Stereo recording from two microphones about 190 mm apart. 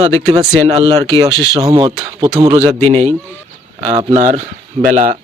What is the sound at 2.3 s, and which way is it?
Speech, 35° right (ahead or behind).